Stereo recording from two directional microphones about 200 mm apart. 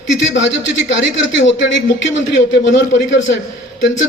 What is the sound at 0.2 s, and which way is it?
A man's voice, 65° left (ahead or behind).